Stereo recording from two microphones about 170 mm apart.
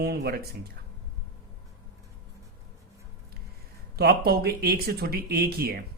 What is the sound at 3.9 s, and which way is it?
Speech, 65° right (ahead or behind).